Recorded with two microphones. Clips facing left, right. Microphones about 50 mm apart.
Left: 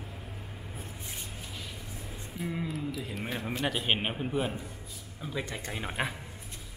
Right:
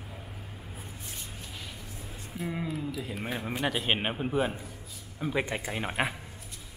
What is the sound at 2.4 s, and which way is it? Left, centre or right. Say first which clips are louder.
A man's voice: right 1 dB; centre.